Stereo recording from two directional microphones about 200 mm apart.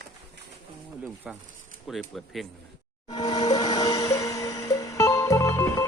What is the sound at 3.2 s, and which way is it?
Music, 20° left (ahead or behind).